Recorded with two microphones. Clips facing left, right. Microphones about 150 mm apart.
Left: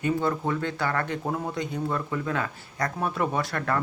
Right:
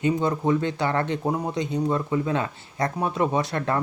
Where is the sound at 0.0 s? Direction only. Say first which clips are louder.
Right 3 dB; 20° right (ahead or behind).